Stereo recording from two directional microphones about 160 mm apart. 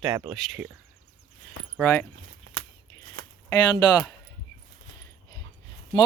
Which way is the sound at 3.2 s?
65° right (ahead or behind).